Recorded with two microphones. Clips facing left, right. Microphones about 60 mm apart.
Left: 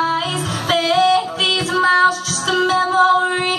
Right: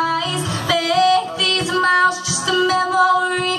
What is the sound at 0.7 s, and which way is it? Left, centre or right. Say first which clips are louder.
Female singing: left 2 dB; right.